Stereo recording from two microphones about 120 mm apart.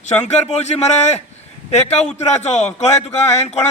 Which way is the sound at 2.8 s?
65° left (ahead or behind).